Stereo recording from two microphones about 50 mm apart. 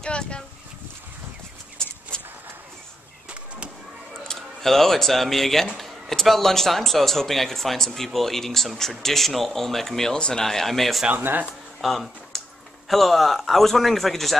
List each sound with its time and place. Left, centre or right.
0.0 s speech: centre
1.8 s a sound: centre
3.3 s fireworks: right
4.3 s a man's voice: centre
11.1 s speech: right
11.8 s speech: centre